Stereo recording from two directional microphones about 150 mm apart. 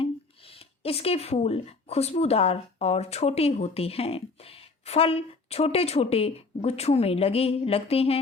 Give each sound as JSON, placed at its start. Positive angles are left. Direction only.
{"t": 0.0, "sound": "speech", "side_deg": 40}